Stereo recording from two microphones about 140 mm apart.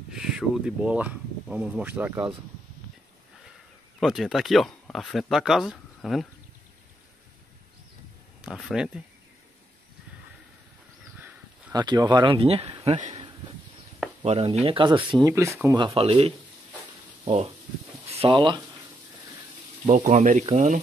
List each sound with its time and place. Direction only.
0.1 s speech: 5° right (ahead or behind)
4.0 s speech: centre (ahead or behind)
8.5 s speech: centre (ahead or behind)
11.7 s speech: 30° right (ahead or behind); by 13.2 s 55° right (ahead or behind)
14.2 s speech: 50° right (ahead or behind)
15.2 s speech: 20° right (ahead or behind)
15.8 s speech: 40° right (ahead or behind)
19.9 s speech: 60° right (ahead or behind)